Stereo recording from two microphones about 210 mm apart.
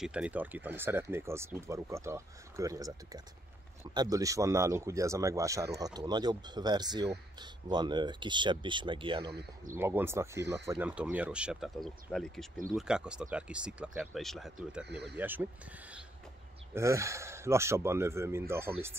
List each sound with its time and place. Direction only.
0.0 s speech: 5° right (ahead or behind); by 9.3 s 25° right (ahead or behind)
9.3 s speech: 50° right (ahead or behind)
9.8 s speech: 10° right (ahead or behind)
14.9 s speech: 50° right (ahead or behind)
15.1 s speech: 10° right (ahead or behind)
16.7 s speech: 15° right (ahead or behind)